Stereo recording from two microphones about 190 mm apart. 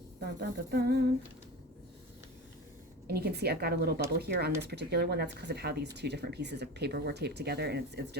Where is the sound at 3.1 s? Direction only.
55° right (ahead or behind).